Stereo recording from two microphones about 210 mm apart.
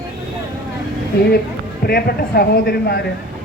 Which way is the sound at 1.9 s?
45° left (ahead or behind).